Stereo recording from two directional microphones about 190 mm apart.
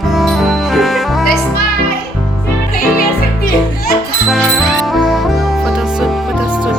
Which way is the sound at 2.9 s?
50° left (ahead or behind).